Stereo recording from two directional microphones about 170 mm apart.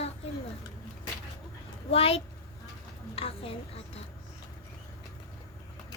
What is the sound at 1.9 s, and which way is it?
A woman's voice, 35° left (ahead or behind).